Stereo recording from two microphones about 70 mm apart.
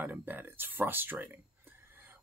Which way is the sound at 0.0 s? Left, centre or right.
Right.